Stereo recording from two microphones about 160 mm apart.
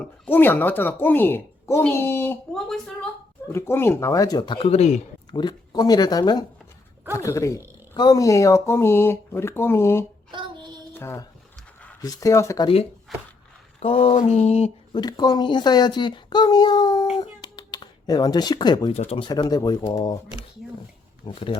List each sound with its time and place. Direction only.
0.0 s a woman's voice: 10° left (ahead or behind)
2.6 s a woman's voice: 5° left (ahead or behind)
3.5 s a woman's voice: 15° left (ahead or behind); by 5.0 s 45° left (ahead or behind)
5.3 s a woman's voice: 25° left (ahead or behind)
10.3 s child singing: 30° right (ahead or behind)
10.9 s a woman's voice: 15° left (ahead or behind)
12.6 s a sound: 35° left (ahead or behind)
14.9 s a woman's voice: 25° left (ahead or behind)
17.2 s a sound: 25° left (ahead or behind)
18.9 s a woman's voice: 40° left (ahead or behind)
21.2 s a sound: 30° left (ahead or behind)